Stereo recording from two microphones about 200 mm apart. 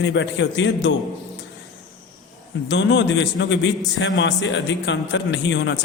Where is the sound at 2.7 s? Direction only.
60° left (ahead or behind).